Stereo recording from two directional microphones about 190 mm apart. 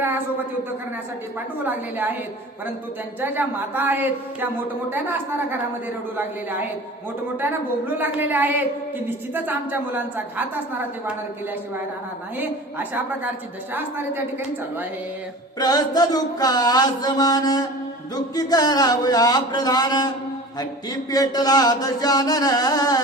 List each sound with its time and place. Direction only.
0.0 s a woman's voice: 10° right (ahead or behind)
1.6 s a woman's voice: 10° right (ahead or behind)
3.2 s a woman's voice: 10° right (ahead or behind)
12.4 s a woman's voice: 10° right (ahead or behind)
15.5 s a sound: 20° left (ahead or behind)
21.1 s a sound: 20° left (ahead or behind)